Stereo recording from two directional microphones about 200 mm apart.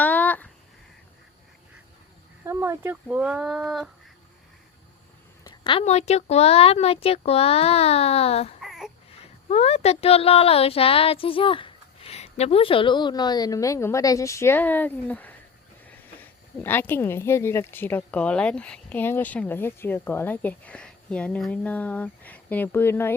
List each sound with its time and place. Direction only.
0.0 s a sound: 10° left (ahead or behind)
2.4 s speech: 15° right (ahead or behind)
5.4 s a woman's voice: 25° left (ahead or behind)
8.6 s baby cry: centre (ahead or behind)
9.5 s speech: 30° left (ahead or behind); by 23.1 s 10° left (ahead or behind)